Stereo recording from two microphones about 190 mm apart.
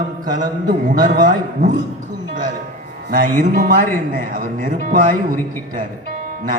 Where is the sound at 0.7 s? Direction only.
45° right (ahead or behind).